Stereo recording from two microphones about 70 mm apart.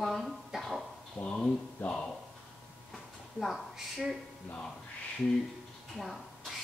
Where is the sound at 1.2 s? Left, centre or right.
Centre.